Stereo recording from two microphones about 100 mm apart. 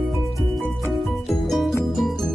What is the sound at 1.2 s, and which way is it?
Music, centre (ahead or behind).